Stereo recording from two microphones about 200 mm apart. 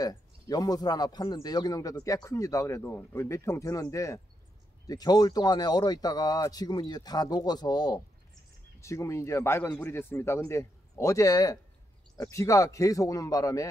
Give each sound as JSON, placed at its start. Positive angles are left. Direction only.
{"t": 0.0, "sound": "speech", "side_deg": 20}